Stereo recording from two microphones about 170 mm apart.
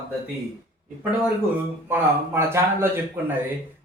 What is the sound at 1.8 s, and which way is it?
Speech, 15° right (ahead or behind).